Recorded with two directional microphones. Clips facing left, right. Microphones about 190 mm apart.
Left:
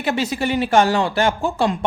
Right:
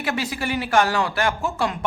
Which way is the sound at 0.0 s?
25° left (ahead or behind).